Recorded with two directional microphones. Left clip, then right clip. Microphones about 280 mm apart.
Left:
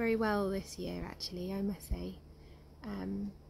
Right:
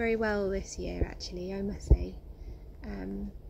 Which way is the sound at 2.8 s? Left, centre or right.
Centre.